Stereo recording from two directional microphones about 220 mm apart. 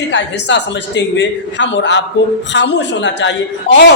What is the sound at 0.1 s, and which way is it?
A man's voice, 55° left (ahead or behind).